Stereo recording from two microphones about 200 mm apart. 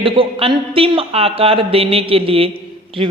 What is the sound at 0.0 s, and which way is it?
Speech, 25° right (ahead or behind).